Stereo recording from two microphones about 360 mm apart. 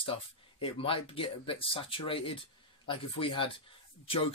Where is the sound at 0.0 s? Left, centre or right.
Centre.